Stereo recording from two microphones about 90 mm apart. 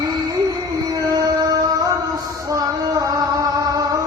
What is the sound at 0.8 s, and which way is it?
Music, 40° right (ahead or behind).